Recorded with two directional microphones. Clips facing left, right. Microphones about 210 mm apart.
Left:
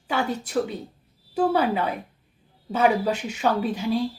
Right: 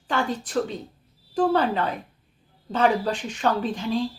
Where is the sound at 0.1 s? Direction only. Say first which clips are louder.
Even; 10° left (ahead or behind).